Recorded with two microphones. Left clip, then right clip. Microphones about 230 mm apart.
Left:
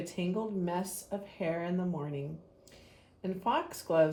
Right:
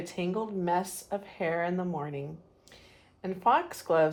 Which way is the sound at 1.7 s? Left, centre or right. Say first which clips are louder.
Right 3 dB; centre.